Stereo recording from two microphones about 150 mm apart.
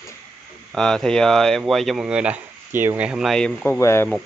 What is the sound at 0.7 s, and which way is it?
Speech, 5° left (ahead or behind).